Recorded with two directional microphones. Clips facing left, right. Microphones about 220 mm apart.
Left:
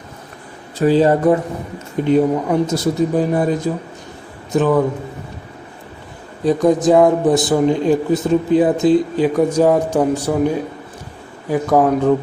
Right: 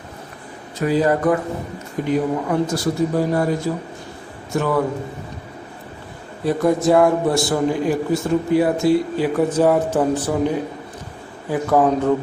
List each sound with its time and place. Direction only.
0.8 s speech: 30° left (ahead or behind)
6.4 s a man's voice: 15° left (ahead or behind)